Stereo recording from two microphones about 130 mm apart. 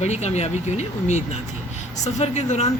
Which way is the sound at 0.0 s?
60° left (ahead or behind).